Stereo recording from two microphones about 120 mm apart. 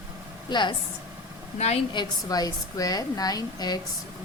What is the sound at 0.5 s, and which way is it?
Speech, 40° left (ahead or behind).